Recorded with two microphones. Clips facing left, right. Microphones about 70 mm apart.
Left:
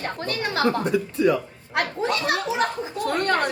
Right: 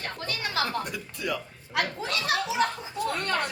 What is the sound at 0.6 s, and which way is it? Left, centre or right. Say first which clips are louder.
Speech: left 9 dB; left.